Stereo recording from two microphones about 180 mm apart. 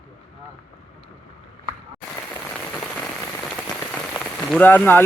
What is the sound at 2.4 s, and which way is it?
Rain on surface, 5° left (ahead or behind).